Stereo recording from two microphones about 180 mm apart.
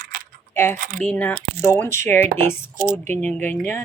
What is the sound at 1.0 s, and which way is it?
A woman's voice, 10° left (ahead or behind).